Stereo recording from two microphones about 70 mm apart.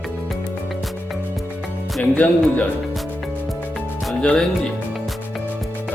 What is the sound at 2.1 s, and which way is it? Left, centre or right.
Music, left.